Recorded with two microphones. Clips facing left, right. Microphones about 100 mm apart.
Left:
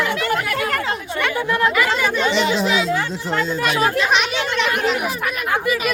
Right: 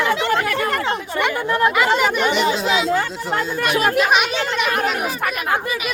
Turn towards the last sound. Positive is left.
turn(degrees=-25)  # may be behind; listen again after turning